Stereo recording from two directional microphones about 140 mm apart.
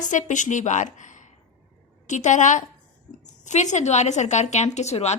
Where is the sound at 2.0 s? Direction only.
60° left (ahead or behind).